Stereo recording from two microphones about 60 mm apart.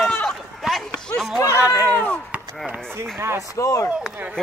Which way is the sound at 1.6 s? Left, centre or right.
Right.